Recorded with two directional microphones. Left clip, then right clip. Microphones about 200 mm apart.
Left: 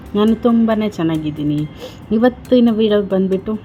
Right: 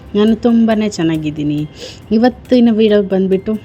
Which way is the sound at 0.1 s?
20° right (ahead or behind).